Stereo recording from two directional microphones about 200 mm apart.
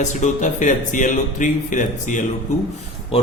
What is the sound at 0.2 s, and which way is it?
Speech, 40° left (ahead or behind).